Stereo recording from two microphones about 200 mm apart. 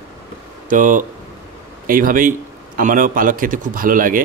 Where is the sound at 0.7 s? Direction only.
40° right (ahead or behind).